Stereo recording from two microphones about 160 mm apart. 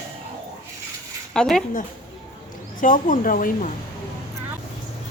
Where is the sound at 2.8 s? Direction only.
55° left (ahead or behind).